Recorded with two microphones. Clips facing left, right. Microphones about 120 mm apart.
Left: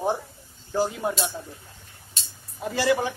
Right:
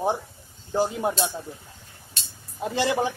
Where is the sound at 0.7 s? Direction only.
20° right (ahead or behind).